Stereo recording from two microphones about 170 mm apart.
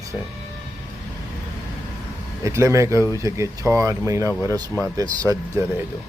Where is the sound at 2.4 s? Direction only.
15° right (ahead or behind).